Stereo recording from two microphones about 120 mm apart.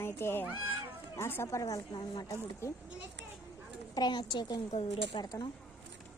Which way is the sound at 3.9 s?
35° left (ahead or behind).